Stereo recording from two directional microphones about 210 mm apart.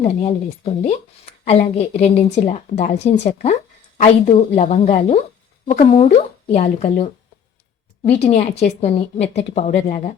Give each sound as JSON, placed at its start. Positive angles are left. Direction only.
{"t": 0.0, "sound": "speech", "side_deg": 30}